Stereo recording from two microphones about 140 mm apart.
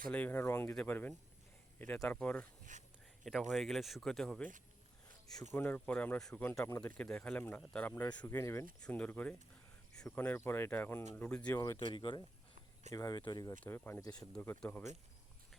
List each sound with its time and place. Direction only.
0.1 s speech: 10° left (ahead or behind)
3.2 s speech: centre (ahead or behind)
5.5 s speech: 10° left (ahead or behind)
7.0 s speech: 10° left (ahead or behind)
11.9 s speech: 35° left (ahead or behind)
13.7 s speech: 15° left (ahead or behind)